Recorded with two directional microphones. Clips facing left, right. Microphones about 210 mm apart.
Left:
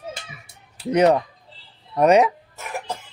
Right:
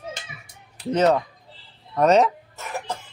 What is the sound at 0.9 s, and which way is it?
Speech, 15° left (ahead or behind).